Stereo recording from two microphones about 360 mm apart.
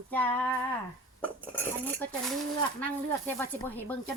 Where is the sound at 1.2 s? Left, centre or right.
Centre.